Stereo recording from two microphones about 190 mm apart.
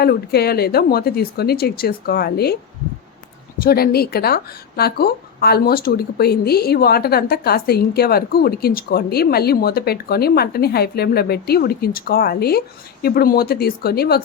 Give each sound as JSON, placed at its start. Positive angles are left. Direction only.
{"t": 0.0, "sound": "speech", "side_deg": 55}
{"t": 3.6, "sound": "a woman's voice", "side_deg": 55}